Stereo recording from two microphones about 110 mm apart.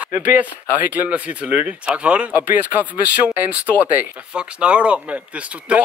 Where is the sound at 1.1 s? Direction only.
10° right (ahead or behind).